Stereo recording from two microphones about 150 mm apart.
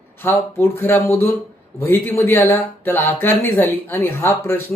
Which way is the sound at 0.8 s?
15° left (ahead or behind).